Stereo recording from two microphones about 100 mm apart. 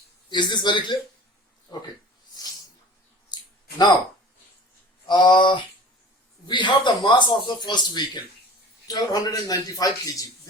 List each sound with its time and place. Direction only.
0.3 s speech: 50° left (ahead or behind)
3.2 s a sound: 45° left (ahead or behind)
5.0 s speech: 50° left (ahead or behind)